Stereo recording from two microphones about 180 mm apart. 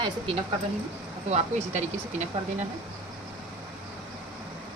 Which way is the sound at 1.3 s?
40° right (ahead or behind).